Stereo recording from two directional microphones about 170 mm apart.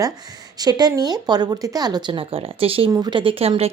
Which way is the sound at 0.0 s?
25° right (ahead or behind).